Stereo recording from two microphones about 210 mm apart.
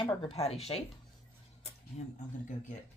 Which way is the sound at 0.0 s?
25° left (ahead or behind).